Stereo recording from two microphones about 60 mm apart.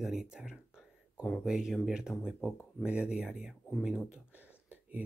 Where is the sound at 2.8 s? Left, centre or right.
Centre.